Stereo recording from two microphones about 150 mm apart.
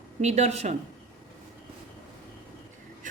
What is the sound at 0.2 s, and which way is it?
Speech, 45° right (ahead or behind).